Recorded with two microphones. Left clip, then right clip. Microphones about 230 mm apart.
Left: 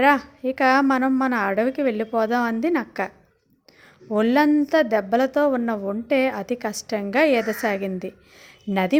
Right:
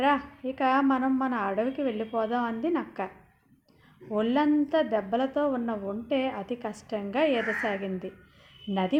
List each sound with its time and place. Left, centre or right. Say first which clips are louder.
0.0 s a woman's voice: left 7 dB; left
4.1 s a woman's voice: left 7 dB; left